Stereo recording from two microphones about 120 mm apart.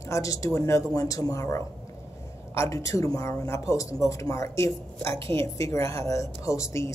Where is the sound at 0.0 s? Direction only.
25° left (ahead or behind).